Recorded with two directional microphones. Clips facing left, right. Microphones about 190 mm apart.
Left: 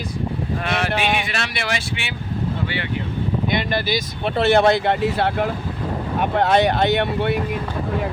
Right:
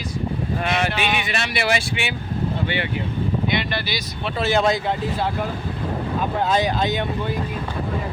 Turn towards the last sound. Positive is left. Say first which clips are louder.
# left 4 dB
turn(degrees=70)  # may be behind; listen again after turning